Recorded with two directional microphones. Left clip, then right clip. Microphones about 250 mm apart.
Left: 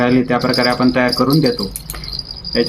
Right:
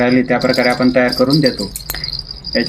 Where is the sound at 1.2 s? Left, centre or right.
Centre.